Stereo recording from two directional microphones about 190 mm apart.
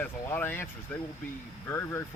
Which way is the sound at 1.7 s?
15° left (ahead or behind).